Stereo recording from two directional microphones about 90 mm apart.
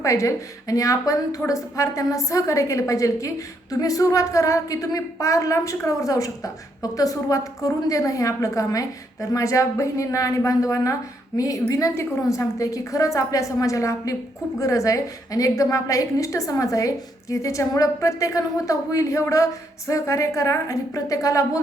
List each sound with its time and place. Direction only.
0.0 s a woman's voice: 35° left (ahead or behind)